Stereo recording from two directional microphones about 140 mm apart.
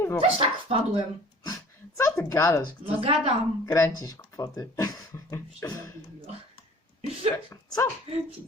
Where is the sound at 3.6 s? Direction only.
20° left (ahead or behind).